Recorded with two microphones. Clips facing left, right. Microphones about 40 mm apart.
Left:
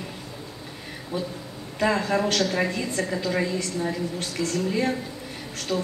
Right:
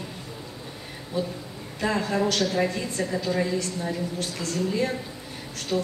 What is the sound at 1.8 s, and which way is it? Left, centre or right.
A woman's voice, left.